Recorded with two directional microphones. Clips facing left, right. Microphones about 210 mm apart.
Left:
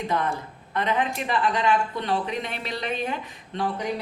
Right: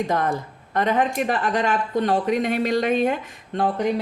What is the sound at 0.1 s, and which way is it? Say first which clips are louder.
Speech: right 4 dB; 45° right (ahead or behind).